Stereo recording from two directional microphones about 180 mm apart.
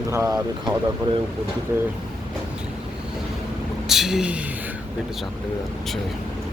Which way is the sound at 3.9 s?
Centre (ahead or behind).